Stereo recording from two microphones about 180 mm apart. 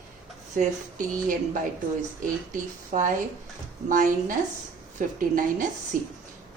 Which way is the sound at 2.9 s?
45° right (ahead or behind).